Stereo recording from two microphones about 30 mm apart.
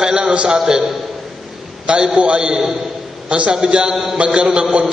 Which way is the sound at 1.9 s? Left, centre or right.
Right.